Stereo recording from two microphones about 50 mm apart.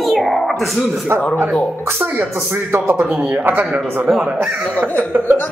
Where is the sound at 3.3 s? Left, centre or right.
Right.